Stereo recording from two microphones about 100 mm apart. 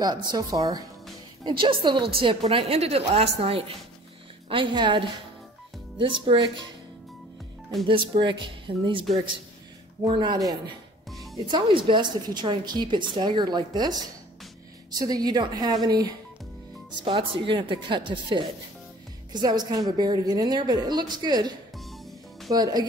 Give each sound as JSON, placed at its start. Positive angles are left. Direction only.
{"t": 0.0, "sound": "speech", "side_deg": -45}
{"t": 1.4, "sound": "a woman's voice", "side_deg": -60}
{"t": 4.5, "sound": "a woman's voice", "side_deg": -55}
{"t": 7.8, "sound": "a woman's voice", "side_deg": -55}
{"t": 10.0, "sound": "a woman's voice", "side_deg": -55}
{"t": 11.1, "sound": "music", "side_deg": 0}
{"t": 11.3, "sound": "a woman's voice", "side_deg": -50}
{"t": 17.0, "sound": "a woman's voice", "side_deg": -55}
{"t": 21.7, "sound": "music", "side_deg": 0}
{"t": 22.5, "sound": "speech", "side_deg": -40}